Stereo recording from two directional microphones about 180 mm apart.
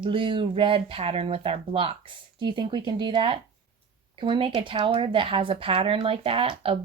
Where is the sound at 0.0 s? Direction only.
30° right (ahead or behind).